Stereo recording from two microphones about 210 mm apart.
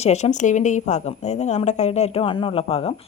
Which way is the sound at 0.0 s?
30° left (ahead or behind).